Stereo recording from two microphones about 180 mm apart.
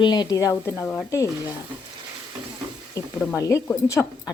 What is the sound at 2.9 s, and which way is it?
Speech, 20° left (ahead or behind).